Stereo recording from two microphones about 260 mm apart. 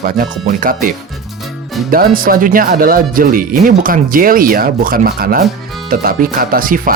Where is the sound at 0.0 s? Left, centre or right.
Right.